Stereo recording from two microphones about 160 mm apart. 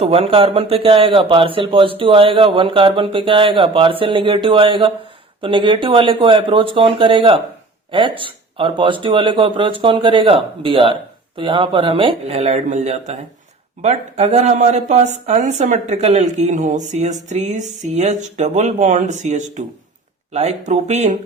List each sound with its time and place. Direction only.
0.0 s speech: 40° right (ahead or behind)